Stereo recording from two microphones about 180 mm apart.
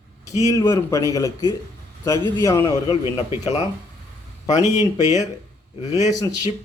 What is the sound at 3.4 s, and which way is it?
Speech, 40° left (ahead or behind).